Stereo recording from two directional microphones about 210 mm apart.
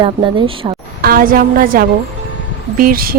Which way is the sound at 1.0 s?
45° right (ahead or behind).